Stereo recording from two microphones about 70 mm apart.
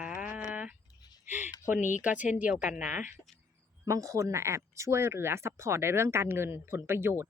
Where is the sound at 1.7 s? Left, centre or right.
Right.